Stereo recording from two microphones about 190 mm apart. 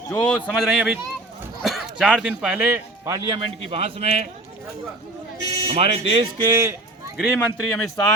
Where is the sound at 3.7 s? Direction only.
30° right (ahead or behind).